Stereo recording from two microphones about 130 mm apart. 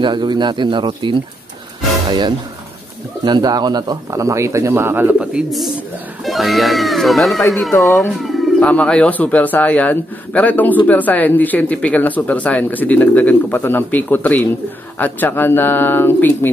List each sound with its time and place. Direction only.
0.0 s a man's voice: 35° right (ahead or behind); by 16.3 s 15° left (ahead or behind)